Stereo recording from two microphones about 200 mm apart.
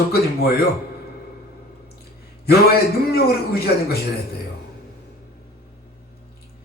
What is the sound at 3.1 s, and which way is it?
Speech, 55° left (ahead or behind).